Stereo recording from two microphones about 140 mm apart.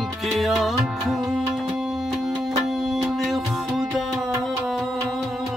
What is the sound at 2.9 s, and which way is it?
Music, centre (ahead or behind).